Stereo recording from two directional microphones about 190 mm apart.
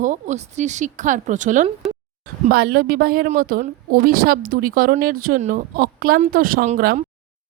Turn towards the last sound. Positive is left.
turn(degrees=-45)  # may be behind; listen again after turning